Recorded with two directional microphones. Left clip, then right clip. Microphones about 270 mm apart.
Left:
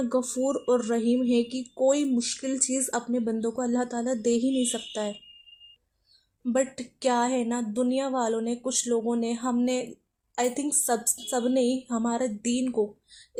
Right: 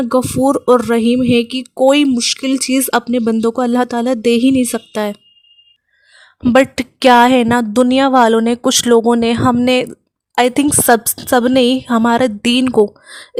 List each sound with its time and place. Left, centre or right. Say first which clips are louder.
0.1 s speech: right 16 dB; right
6.4 s speech: right 16 dB; right